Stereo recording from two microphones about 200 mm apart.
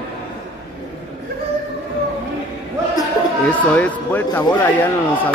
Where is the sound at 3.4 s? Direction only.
5° left (ahead or behind).